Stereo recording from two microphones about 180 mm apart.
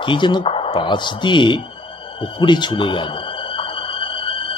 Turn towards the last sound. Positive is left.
turn(degrees=30)  # may be behind; listen again after turning